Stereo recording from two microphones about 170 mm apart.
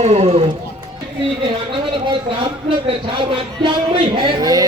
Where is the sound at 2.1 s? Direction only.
30° right (ahead or behind).